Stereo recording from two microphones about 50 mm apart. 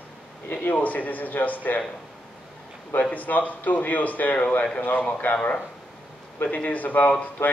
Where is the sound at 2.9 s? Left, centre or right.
Left.